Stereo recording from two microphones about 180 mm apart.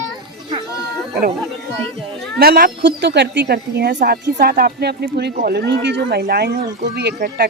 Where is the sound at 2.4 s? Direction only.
60° right (ahead or behind).